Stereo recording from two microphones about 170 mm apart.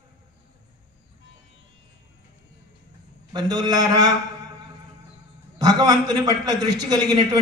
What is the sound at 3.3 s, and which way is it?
Speech, 25° right (ahead or behind).